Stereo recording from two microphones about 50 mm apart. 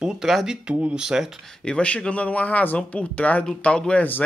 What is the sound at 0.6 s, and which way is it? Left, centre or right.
Speech, right.